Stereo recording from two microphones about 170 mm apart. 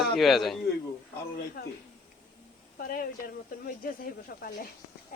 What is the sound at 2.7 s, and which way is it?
Speech, 60° left (ahead or behind).